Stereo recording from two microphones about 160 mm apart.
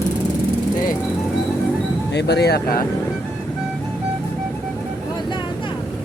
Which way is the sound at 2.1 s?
90° left.